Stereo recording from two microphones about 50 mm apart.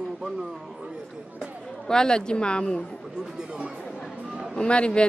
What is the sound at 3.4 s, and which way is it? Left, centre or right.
Speech, right.